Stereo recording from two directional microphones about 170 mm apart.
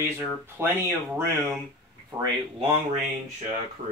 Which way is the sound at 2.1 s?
25° right (ahead or behind).